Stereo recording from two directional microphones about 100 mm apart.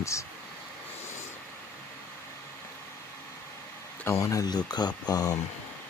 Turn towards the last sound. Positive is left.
turn(degrees=40)  # may be behind; listen again after turning